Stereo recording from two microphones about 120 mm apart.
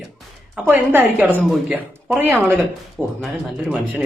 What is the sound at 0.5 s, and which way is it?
Speech, 15° right (ahead or behind).